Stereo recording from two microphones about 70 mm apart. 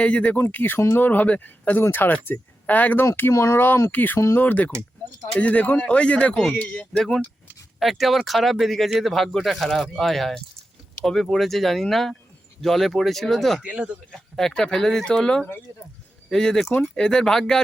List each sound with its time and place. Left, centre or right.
0.0 s speech: centre
3.3 s speech: left; by 7.0 s centre
7.8 s speech: centre
13.7 s speech: centre
14.1 s speech: centre